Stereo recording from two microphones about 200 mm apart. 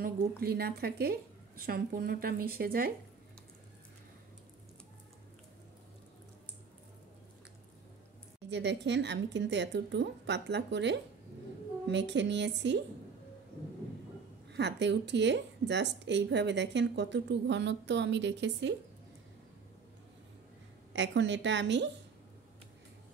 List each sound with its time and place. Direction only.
0.4 s a woman's voice: 50° right (ahead or behind)
8.5 s speech: 60° right (ahead or behind)
14.5 s speech: 60° right (ahead or behind)
20.9 s speech: 65° right (ahead or behind)